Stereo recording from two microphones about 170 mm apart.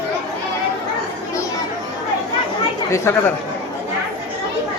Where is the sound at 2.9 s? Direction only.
15° left (ahead or behind).